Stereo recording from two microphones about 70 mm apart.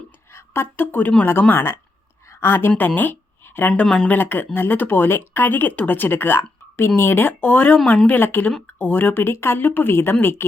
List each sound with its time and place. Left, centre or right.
0.3 s speech: left
2.2 s a sound: left
2.5 s a woman's voice: left
3.8 s speech: centre
4.1 s a woman's voice: left